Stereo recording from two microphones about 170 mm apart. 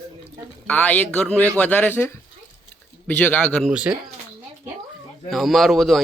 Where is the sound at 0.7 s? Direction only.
10° left (ahead or behind).